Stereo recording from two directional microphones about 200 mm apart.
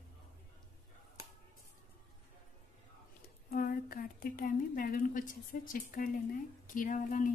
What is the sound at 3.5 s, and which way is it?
A woman's voice, 45° left (ahead or behind).